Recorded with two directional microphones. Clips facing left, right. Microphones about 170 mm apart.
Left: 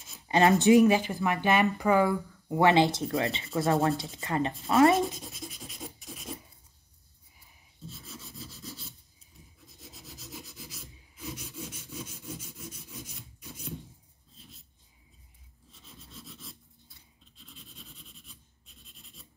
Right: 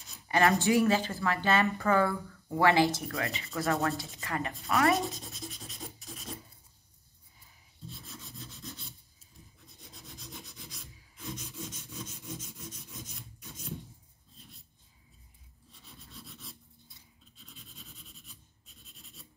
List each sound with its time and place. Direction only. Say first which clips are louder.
0.0 s speech: left 3 dB; 20° left (ahead or behind)
4.9 s writing: left 4 dB; centre (ahead or behind)
8.0 s rub: left 2 dB; centre (ahead or behind)
11.1 s wood: left 1 dB; 5° left (ahead or behind)
15.9 s rub: left 2 dB; centre (ahead or behind)
17.4 s scratch: left 2 dB; centre (ahead or behind)